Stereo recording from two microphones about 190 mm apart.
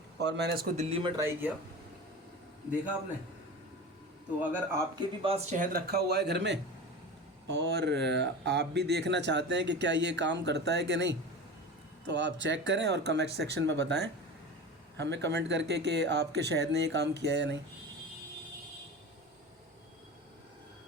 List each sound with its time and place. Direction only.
0.2 s speech: 60° right (ahead or behind)
0.8 s speech: 30° right (ahead or behind)
1.2 s speech: 10° right (ahead or behind)
4.9 s speech: 30° right (ahead or behind); by 17.6 s 65° right (ahead or behind)